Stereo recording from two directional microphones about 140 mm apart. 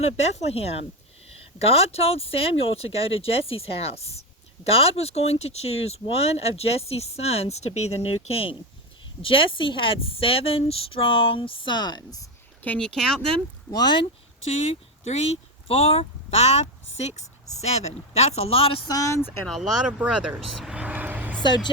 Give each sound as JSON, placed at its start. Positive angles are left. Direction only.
{"t": 0.0, "sound": "speech", "side_deg": 50}
{"t": 12.6, "sound": "speech", "side_deg": 10}
{"t": 13.7, "sound": "speech", "side_deg": 30}
{"t": 14.4, "sound": "speech", "side_deg": 50}
{"t": 18.9, "sound": "speech", "side_deg": 25}
{"t": 19.5, "sound": "speech", "side_deg": 0}
{"t": 20.6, "sound": "vehicle", "side_deg": -5}
{"t": 21.4, "sound": "speech", "side_deg": 30}